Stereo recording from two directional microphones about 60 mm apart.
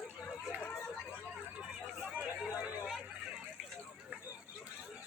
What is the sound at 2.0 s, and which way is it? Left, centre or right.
Chatter, right.